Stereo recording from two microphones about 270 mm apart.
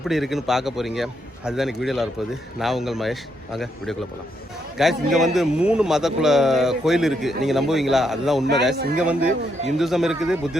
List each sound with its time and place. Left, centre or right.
0.0 s a man's voice: centre
8.7 s speech: right
9.0 s a man's voice: centre